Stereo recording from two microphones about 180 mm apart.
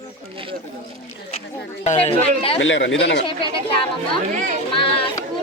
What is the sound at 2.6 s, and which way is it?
Speech, 90° left.